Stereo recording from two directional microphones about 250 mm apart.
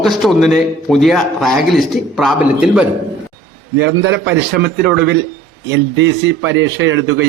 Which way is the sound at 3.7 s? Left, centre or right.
Right.